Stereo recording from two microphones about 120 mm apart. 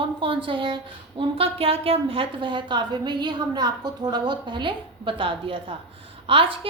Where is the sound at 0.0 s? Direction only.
45° right (ahead or behind).